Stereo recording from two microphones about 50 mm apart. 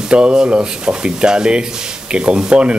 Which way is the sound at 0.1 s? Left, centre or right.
Centre.